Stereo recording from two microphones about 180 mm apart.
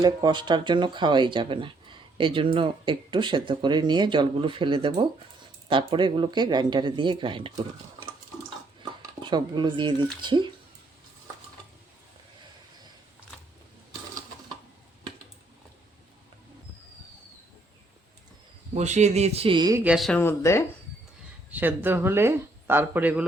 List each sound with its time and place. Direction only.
0.0 s speech: 25° right (ahead or behind)
8.8 s speech: 25° right (ahead or behind)
18.7 s a man's voice: 40° right (ahead or behind); by 19.8 s 20° right (ahead or behind)
19.8 s speech: 5° right (ahead or behind)
20.1 s speech: 15° left (ahead or behind)
21.5 s speech: 10° right (ahead or behind)